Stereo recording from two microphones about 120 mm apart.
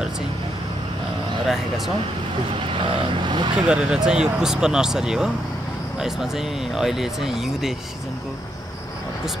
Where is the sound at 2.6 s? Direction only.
45° right (ahead or behind).